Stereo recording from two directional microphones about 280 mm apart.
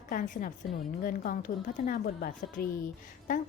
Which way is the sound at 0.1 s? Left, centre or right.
Left.